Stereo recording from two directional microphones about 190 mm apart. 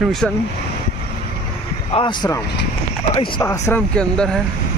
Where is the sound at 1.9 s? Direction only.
25° left (ahead or behind); by 4.4 s 5° left (ahead or behind).